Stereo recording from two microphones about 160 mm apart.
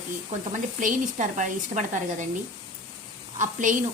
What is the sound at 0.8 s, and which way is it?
Speech, 50° right (ahead or behind).